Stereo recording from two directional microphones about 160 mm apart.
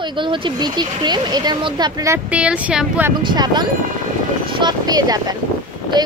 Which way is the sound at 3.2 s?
25° right (ahead or behind).